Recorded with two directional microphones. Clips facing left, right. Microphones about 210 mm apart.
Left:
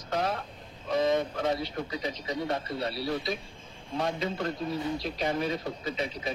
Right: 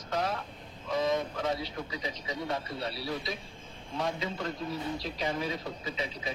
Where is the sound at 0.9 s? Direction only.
60° left (ahead or behind).